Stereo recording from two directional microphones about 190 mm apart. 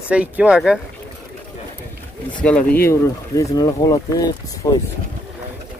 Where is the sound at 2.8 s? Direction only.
15° left (ahead or behind).